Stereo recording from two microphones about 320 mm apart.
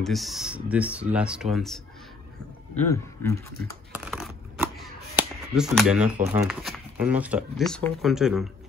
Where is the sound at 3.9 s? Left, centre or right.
Centre.